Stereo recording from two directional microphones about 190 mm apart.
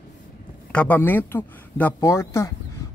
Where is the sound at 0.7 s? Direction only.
10° left (ahead or behind).